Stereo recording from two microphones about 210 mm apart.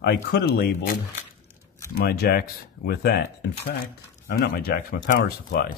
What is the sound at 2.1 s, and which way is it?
Speech, 50° left (ahead or behind).